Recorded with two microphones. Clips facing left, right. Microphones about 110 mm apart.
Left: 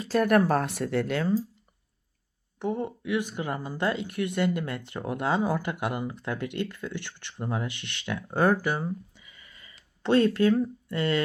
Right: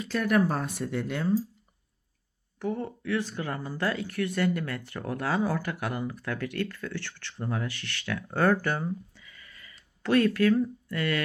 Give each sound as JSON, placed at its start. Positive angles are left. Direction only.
{"t": 0.0, "sound": "speech", "side_deg": 35}
{"t": 0.3, "sound": "speech", "side_deg": 60}
{"t": 2.6, "sound": "speech", "side_deg": 20}
{"t": 8.6, "sound": "a sound", "side_deg": 10}
{"t": 10.0, "sound": "speech", "side_deg": 25}